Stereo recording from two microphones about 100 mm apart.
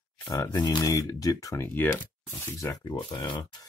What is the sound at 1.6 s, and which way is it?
Speech, 20° left (ahead or behind).